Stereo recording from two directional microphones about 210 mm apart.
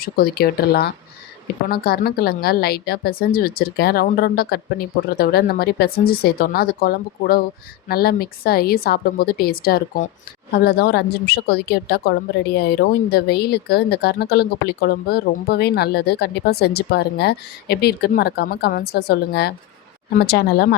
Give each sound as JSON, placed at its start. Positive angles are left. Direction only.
{"t": 0.0, "sound": "a woman's voice", "side_deg": 45}